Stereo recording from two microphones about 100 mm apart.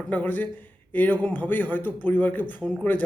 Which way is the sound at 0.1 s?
15° left (ahead or behind).